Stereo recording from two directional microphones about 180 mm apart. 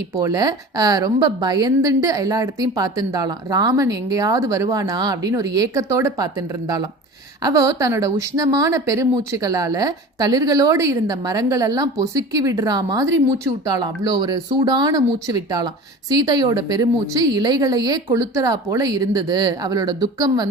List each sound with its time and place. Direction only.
0.2 s a woman's voice: 20° right (ahead or behind)